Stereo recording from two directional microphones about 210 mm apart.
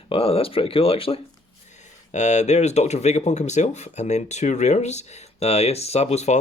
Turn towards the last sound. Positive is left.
turn(degrees=30)  # may be behind; listen again after turning